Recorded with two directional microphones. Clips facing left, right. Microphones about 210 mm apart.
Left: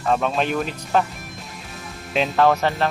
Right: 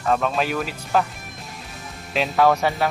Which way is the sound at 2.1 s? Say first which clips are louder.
Left 1 dB; centre (ahead or behind).